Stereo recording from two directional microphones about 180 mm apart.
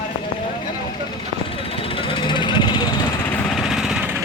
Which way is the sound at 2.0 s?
25° left (ahead or behind).